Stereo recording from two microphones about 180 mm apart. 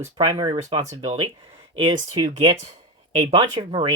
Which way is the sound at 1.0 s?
35° right (ahead or behind).